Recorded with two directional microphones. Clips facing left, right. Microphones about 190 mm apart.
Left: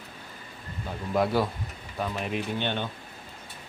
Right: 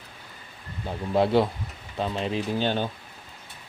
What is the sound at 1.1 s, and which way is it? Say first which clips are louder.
Speech: right 4 dB; 25° right (ahead or behind).